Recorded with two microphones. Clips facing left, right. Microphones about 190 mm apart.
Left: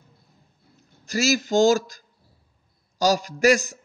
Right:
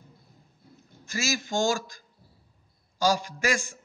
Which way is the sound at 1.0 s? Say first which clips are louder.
Left 8 dB; 40° left (ahead or behind).